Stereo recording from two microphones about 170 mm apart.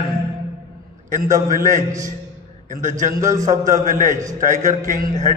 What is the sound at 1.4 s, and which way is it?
Speech, 50° right (ahead or behind).